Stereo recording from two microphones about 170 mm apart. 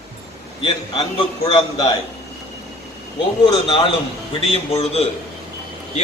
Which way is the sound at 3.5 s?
30° left (ahead or behind).